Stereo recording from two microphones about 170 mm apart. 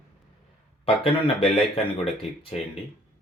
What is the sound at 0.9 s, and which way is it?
Speech, 35° left (ahead or behind).